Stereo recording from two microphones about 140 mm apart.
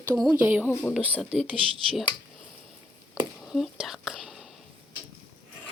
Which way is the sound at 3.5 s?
Centre (ahead or behind).